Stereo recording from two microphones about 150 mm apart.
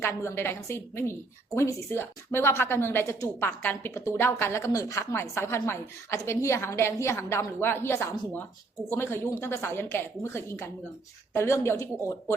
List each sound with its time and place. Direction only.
0.0 s a woman's voice: 20° left (ahead or behind)